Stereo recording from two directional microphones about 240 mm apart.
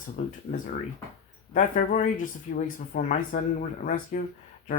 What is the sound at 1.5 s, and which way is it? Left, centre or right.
Speech, left.